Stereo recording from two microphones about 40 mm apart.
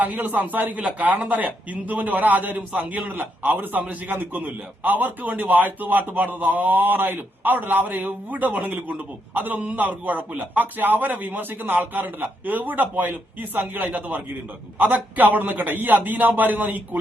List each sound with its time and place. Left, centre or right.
0.0 s a man's voice: right
0.8 s a man's voice: right
1.0 s a man's voice: right